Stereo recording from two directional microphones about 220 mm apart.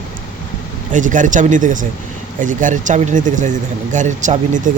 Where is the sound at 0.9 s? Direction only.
35° right (ahead or behind).